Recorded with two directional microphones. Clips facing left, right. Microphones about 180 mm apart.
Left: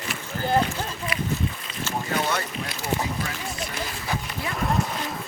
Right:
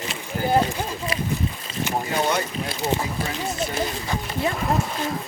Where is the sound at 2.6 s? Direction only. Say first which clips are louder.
Right 3 dB; 30° right (ahead or behind).